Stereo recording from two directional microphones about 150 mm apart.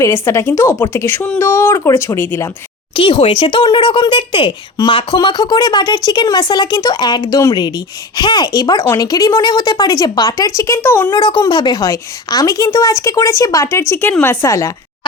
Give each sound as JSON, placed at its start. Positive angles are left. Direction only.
{"t": 0.0, "sound": "a woman's voice", "side_deg": 20}
{"t": 2.9, "sound": "speech", "side_deg": 35}
{"t": 11.1, "sound": "a woman's voice", "side_deg": 30}